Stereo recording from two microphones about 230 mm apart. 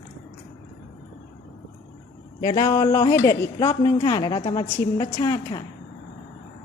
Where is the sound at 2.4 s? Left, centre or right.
Centre.